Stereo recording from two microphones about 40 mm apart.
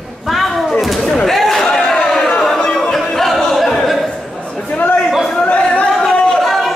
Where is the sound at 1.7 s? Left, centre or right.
Centre.